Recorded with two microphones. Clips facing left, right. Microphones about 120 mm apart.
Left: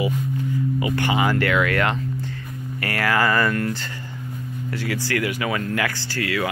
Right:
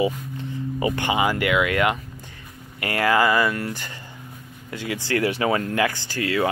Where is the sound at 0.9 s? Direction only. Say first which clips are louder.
Left 2 dB; 20° right (ahead or behind).